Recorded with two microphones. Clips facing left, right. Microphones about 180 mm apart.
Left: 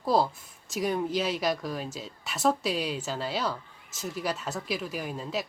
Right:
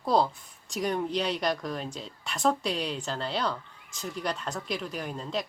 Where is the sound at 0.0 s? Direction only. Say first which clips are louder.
Even; 5° left (ahead or behind).